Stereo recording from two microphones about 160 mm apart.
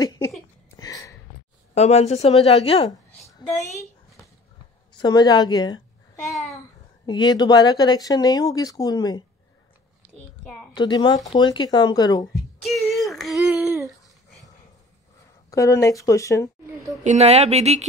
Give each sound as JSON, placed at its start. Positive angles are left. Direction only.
{"t": 0.0, "sound": "a sound", "side_deg": 20}
{"t": 1.8, "sound": "a woman's voice", "side_deg": 40}
{"t": 4.9, "sound": "speech", "side_deg": 25}
{"t": 7.1, "sound": "speech", "side_deg": 25}
{"t": 10.7, "sound": "speech", "side_deg": 30}
{"t": 12.6, "sound": "speech", "side_deg": 0}
{"t": 15.5, "sound": "speech", "side_deg": 20}
{"t": 17.0, "sound": "speech", "side_deg": -45}